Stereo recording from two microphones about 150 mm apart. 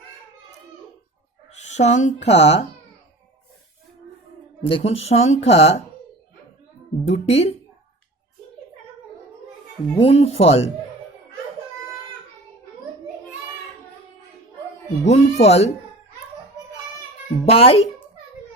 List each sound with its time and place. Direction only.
1.6 s speech: 50° left (ahead or behind)
4.6 s speech: 40° left (ahead or behind)
7.1 s speech: 45° left (ahead or behind)
9.9 s speech: 40° left (ahead or behind)
15.0 s speech: 45° left (ahead or behind)
17.4 s speech: 40° left (ahead or behind)